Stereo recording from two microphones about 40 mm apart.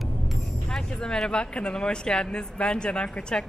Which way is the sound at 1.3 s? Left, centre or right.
Left.